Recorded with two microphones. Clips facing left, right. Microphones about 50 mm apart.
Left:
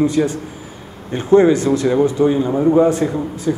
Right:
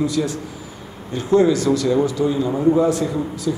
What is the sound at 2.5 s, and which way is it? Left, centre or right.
Speech, centre.